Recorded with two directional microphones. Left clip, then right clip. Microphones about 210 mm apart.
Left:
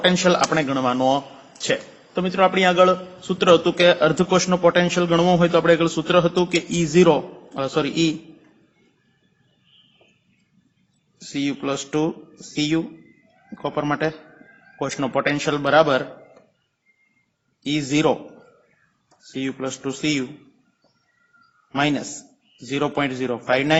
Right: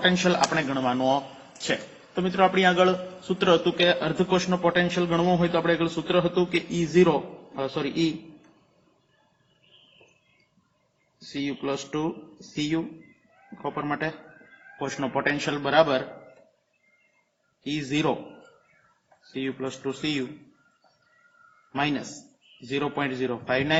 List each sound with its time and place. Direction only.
0.0 s a man's voice: 40° left (ahead or behind)
11.3 s a man's voice: 40° left (ahead or behind)
17.6 s a man's voice: 40° left (ahead or behind)
19.3 s a man's voice: 35° left (ahead or behind)
21.8 s a man's voice: 40° left (ahead or behind)